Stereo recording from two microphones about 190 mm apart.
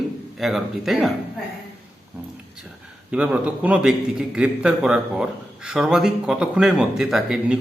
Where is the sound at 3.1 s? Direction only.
5° right (ahead or behind).